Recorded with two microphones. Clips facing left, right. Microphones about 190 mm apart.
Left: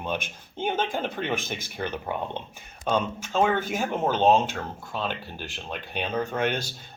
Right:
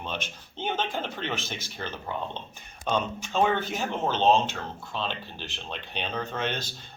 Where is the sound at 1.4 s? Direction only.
50° left (ahead or behind).